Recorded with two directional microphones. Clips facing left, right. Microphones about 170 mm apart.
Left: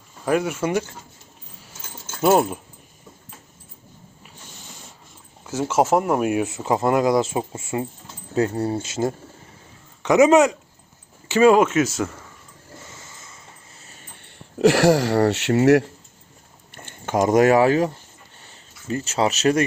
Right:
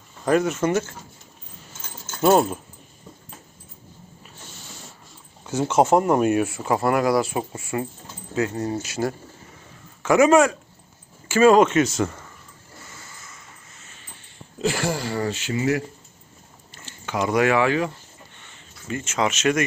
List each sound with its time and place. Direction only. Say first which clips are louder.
0.3 s speech: right 1 dB; 10° left (ahead or behind)
2.0 s speech: even; 10° left (ahead or behind)
5.5 s speech: right 1 dB; 5° left (ahead or behind); by 7.9 s 20° left (ahead or behind)
8.4 s speech: left 3 dB; 30° left (ahead or behind); by 12.1 s 5° left (ahead or behind)
13.0 s a sound: even; 25° left (ahead or behind)
14.3 s speech: left 9 dB; 75° left (ahead or behind)
16.7 s speech: left 5 dB; 55° left (ahead or behind); by 17.9 s 40° left (ahead or behind)
18.3 s a sound: even; 35° left (ahead or behind)